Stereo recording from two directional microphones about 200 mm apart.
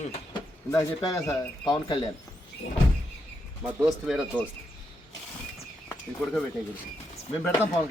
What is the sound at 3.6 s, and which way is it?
Speech, 5° right (ahead or behind).